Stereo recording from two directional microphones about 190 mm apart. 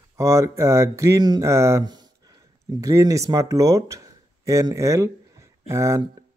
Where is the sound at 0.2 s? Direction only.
15° right (ahead or behind).